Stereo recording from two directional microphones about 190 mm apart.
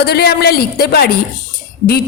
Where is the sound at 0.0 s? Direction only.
60° left (ahead or behind).